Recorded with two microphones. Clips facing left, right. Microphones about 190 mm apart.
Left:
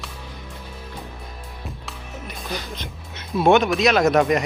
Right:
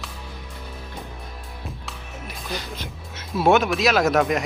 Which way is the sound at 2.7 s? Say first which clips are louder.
Even; 5° right (ahead or behind).